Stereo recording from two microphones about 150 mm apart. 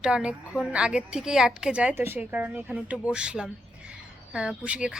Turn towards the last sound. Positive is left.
turn(degrees=-5)  # may be behind; listen again after turning